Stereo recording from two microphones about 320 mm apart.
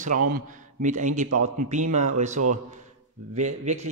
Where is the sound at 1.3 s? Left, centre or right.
Right.